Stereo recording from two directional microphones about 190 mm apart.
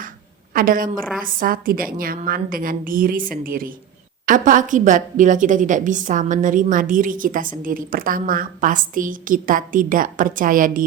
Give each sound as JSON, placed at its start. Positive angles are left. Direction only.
{"t": 0.5, "sound": "a woman's voice", "side_deg": -45}